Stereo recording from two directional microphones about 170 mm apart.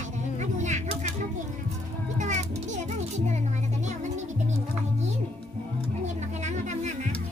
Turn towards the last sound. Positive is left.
turn(degrees=-45)  # may be behind; listen again after turning